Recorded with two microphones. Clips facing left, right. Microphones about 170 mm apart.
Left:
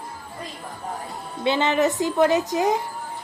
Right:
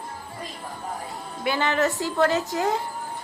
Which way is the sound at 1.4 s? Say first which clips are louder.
Left 3 dB; 20° left (ahead or behind).